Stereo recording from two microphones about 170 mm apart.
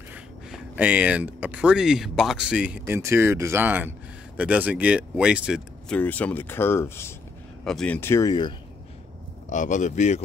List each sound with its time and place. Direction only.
0.1 s speech: 10° right (ahead or behind)
5.9 s speech: 10° left (ahead or behind)
7.6 s speech: 5° left (ahead or behind); by 8.5 s 25° left (ahead or behind)
9.5 s speech: 45° left (ahead or behind)